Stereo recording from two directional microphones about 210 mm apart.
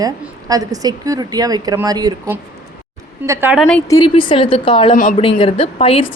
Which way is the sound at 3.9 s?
20° left (ahead or behind).